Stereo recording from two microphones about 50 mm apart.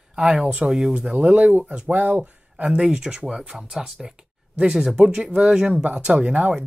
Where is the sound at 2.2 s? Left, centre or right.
Right.